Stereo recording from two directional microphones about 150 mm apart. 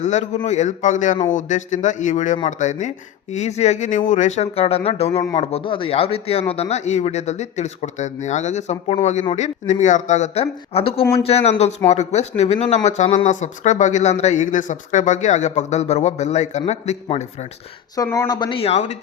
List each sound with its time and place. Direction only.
0.0 s speech: 50° left (ahead or behind)
17.9 s speech: 20° left (ahead or behind); by 18.9 s 45° left (ahead or behind)